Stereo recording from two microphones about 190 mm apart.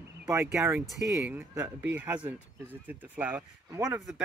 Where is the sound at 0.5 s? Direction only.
10° right (ahead or behind).